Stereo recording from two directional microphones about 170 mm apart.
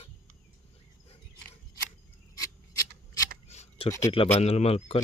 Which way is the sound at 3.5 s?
40° left (ahead or behind).